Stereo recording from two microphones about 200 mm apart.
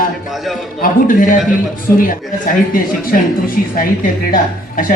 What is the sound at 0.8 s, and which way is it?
Speech, 45° left (ahead or behind).